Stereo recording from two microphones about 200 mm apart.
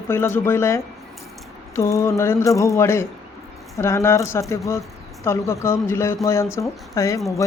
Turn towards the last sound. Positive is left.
turn(degrees=15)  # may be behind; listen again after turning